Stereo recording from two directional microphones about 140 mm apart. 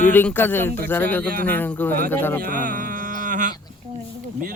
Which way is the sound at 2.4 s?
75° right (ahead or behind).